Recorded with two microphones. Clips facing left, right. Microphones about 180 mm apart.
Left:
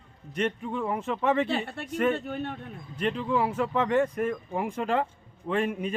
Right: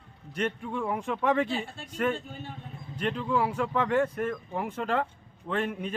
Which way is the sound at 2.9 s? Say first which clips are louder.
Left 1 dB; 5° left (ahead or behind).